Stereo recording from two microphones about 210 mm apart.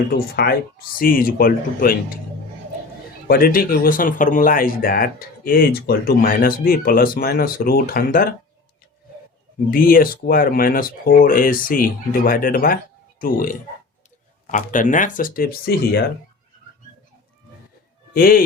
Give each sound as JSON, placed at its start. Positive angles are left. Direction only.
{"t": 0.1, "sound": "speech", "side_deg": 45}
{"t": 3.2, "sound": "speech", "side_deg": 45}
{"t": 9.7, "sound": "speech", "side_deg": 40}
{"t": 18.1, "sound": "speech", "side_deg": 45}